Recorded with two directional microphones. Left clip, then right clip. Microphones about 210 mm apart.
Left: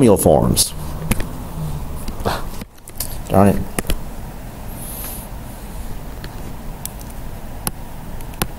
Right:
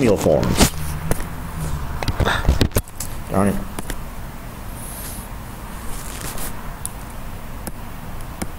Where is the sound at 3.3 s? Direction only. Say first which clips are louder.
Left 6 dB; 35° left (ahead or behind).